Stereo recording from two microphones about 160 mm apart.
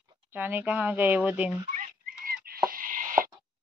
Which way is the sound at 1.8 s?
65° right (ahead or behind).